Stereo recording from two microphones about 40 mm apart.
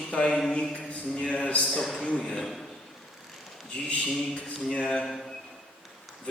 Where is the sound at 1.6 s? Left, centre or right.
Centre.